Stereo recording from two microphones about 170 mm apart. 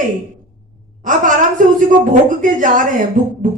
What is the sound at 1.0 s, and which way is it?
A woman's voice, 50° right (ahead or behind).